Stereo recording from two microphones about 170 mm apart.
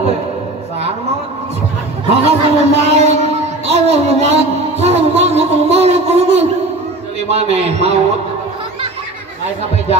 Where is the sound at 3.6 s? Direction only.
40° right (ahead or behind).